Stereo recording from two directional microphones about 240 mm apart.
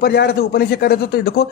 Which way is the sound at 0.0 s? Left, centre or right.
Left.